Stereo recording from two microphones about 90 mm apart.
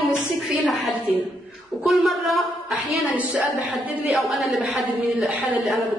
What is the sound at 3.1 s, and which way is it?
Speech, 15° right (ahead or behind).